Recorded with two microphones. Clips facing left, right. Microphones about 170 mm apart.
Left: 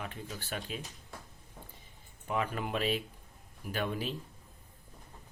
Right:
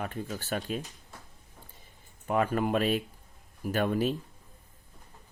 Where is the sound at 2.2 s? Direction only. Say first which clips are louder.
Right 7 dB; 50° right (ahead or behind).